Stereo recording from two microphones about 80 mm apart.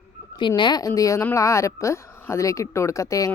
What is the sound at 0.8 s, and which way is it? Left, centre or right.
A woman's voice, left.